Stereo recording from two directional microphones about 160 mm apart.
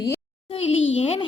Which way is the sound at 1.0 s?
35° left (ahead or behind).